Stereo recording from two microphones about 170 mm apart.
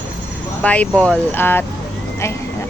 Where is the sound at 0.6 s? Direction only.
10° left (ahead or behind).